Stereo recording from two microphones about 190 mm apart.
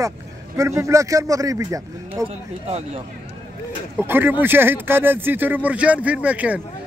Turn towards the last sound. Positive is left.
turn(degrees=-10)  # may be behind; listen again after turning